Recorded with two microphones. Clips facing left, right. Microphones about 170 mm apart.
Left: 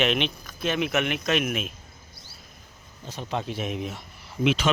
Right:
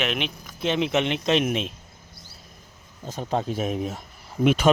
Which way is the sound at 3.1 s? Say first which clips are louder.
Right 4 dB; 45° right (ahead or behind).